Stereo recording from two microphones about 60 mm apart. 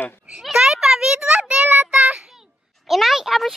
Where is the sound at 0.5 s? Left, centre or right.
Centre.